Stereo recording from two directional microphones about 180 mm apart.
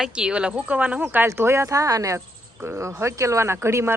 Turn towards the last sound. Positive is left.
turn(degrees=-15)  # may be behind; listen again after turning